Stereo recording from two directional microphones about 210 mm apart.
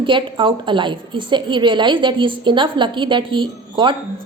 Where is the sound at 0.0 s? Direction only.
25° right (ahead or behind).